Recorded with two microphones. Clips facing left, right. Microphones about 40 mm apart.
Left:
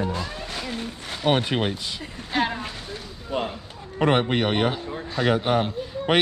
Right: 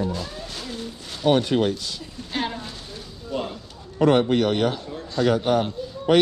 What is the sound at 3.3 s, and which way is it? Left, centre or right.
A man's voice, left.